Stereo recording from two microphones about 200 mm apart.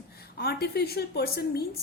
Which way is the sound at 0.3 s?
50° left (ahead or behind).